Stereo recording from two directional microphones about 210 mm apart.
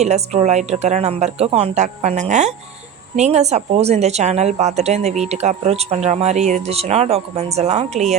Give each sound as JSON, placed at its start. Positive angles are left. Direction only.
{"t": 0.0, "sound": "speech", "side_deg": -30}